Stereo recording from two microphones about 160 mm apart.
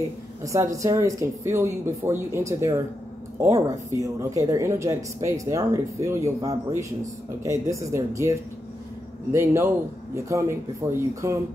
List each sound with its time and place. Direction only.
0.4 s speech: 20° right (ahead or behind)